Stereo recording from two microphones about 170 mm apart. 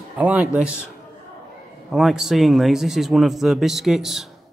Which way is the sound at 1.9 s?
Centre (ahead or behind).